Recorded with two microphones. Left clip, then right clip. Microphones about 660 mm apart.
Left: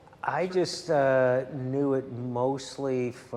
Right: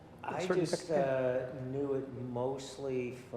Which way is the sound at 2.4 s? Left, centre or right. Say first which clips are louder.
Left 8 dB; left.